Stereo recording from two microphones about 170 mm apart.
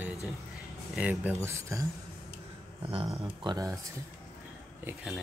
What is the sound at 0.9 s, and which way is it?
Speech, 10° right (ahead or behind).